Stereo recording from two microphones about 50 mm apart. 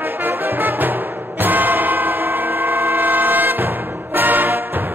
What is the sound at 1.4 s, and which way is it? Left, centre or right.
Train, right.